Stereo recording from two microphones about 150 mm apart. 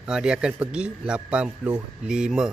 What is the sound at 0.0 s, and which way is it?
Speech, 5° right (ahead or behind).